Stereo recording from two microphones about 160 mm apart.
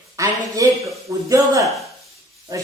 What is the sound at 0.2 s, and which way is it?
A man's voice, 20° right (ahead or behind).